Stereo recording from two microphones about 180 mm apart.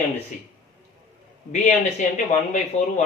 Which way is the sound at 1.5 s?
40° left (ahead or behind).